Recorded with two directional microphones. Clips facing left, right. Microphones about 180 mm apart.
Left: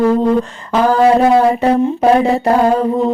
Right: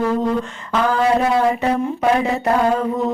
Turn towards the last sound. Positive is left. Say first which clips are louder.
# left 5 dB
turn(degrees=30)  # may be behind; listen again after turning